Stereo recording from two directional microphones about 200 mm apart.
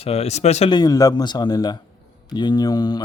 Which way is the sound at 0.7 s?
20° left (ahead or behind).